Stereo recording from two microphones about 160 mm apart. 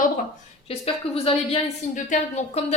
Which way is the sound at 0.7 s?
40° left (ahead or behind).